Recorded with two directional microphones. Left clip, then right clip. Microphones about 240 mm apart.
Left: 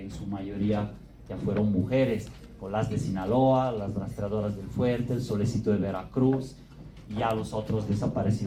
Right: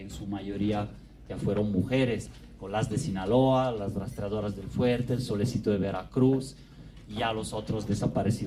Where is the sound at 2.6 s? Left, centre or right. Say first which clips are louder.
Left 1 dB; right.